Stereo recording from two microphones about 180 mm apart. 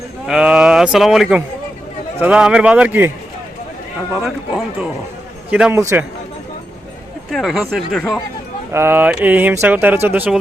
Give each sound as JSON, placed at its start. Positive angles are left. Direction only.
{"t": 0.3, "sound": "speech", "side_deg": -5}
{"t": 4.2, "sound": "speech", "side_deg": -5}
{"t": 7.3, "sound": "speech", "side_deg": 0}
{"t": 8.7, "sound": "speech", "side_deg": -10}